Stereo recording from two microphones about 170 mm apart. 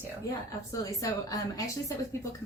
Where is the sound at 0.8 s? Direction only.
20° left (ahead or behind).